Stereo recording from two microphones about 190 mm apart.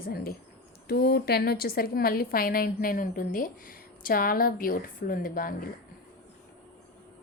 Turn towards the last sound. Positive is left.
turn(degrees=50)  # may be behind; listen again after turning